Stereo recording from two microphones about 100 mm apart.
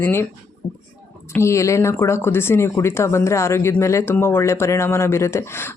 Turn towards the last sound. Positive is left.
turn(degrees=25)  # may be behind; listen again after turning